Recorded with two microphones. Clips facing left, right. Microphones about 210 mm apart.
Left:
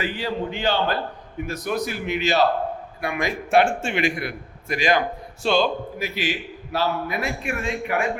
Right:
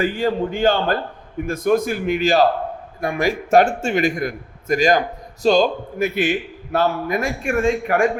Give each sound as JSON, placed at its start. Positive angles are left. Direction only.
{"t": 0.0, "sound": "a man's voice", "side_deg": -50}
{"t": 6.1, "sound": "a man's voice", "side_deg": -50}